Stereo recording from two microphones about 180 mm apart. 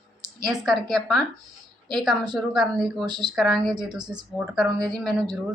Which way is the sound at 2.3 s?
Centre (ahead or behind).